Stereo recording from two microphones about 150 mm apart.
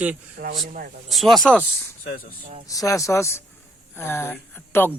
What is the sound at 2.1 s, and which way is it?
Speech, 75° left (ahead or behind).